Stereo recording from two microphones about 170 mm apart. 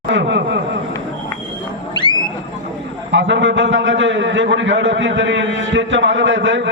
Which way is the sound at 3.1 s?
90° right.